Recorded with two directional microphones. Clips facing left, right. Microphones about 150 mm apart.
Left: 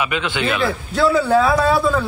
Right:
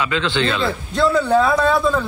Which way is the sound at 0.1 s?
15° left (ahead or behind).